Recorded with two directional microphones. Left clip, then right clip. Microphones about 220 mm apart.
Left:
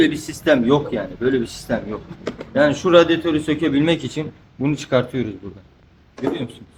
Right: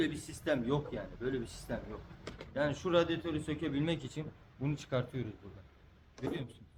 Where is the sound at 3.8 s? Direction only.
15° right (ahead or behind).